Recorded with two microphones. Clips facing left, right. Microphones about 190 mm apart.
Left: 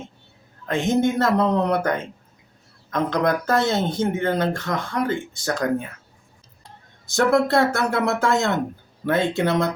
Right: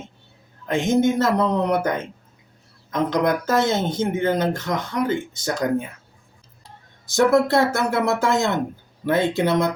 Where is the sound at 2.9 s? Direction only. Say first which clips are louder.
Right 1 dB; 20° right (ahead or behind).